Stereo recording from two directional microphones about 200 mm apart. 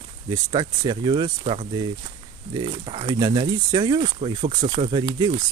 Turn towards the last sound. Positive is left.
turn(degrees=-25)  # may be behind; listen again after turning